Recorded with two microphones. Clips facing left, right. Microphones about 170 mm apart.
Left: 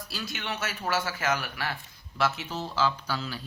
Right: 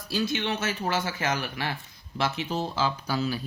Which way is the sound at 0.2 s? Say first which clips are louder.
Right 7 dB; 25° right (ahead or behind).